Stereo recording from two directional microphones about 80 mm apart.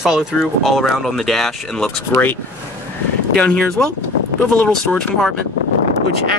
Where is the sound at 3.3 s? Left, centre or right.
Centre.